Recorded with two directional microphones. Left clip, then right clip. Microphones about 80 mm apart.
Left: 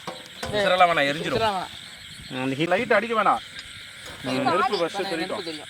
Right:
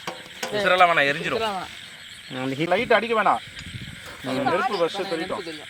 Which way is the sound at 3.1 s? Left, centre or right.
Right.